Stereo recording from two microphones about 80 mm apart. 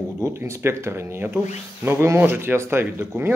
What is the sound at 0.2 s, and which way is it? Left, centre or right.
Speech, right.